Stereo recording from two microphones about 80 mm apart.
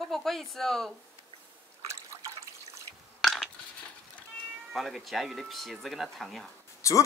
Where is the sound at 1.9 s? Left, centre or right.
Right.